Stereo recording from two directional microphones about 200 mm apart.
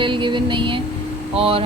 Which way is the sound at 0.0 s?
25° right (ahead or behind).